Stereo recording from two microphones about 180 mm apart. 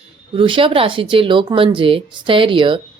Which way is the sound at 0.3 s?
30° right (ahead or behind).